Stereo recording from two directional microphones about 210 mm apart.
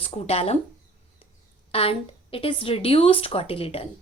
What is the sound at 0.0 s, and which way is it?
Speech, 30° left (ahead or behind).